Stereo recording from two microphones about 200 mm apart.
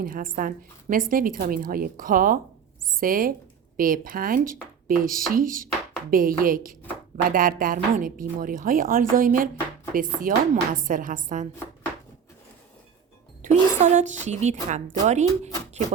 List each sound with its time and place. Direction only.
0.0 s a woman's voice: 45° right (ahead or behind)
13.4 s a woman's voice: 40° right (ahead or behind)